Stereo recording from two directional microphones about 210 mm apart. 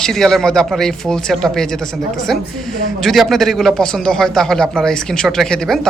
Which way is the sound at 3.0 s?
Centre (ahead or behind).